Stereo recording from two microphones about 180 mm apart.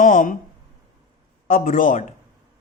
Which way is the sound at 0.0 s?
45° left (ahead or behind).